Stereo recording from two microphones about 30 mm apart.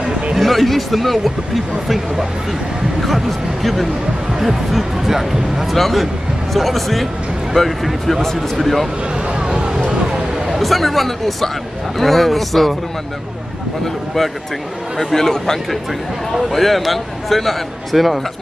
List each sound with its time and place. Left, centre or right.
0.4 s speech: centre
4.3 s speech: centre
5.7 s speech: centre
9.1 s a sound: right
10.6 s speech: centre
15.1 s speech: centre
16.4 s speech: centre